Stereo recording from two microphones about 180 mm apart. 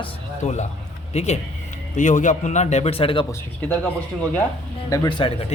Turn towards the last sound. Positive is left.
turn(degrees=25)  # may be behind; listen again after turning